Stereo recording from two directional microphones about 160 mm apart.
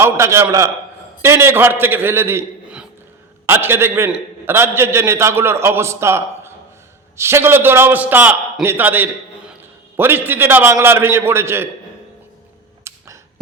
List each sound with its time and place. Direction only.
0.0 s a man's voice: 15° right (ahead or behind)
12.9 s arrow: 15° right (ahead or behind)